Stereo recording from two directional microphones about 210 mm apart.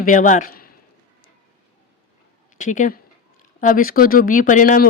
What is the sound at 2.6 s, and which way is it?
Speech, 35° left (ahead or behind).